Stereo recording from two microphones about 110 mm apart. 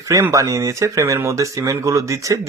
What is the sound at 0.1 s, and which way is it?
Speech, 30° right (ahead or behind).